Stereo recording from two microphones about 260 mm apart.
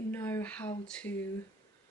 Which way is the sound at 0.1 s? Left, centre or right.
Centre.